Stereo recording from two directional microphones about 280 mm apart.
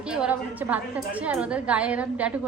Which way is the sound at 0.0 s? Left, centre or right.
Centre.